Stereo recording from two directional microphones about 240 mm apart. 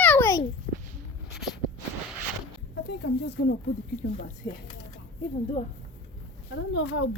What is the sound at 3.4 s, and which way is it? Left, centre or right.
Speech, left.